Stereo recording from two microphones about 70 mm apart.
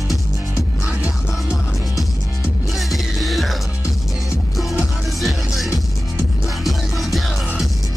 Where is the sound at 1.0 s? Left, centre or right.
Left.